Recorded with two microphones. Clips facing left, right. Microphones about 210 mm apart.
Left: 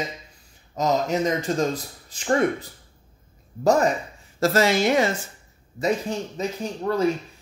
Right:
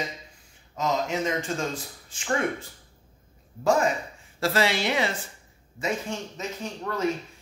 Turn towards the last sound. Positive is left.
turn(degrees=35)  # may be behind; listen again after turning